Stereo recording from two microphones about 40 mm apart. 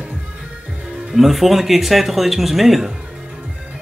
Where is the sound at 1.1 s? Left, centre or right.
Centre.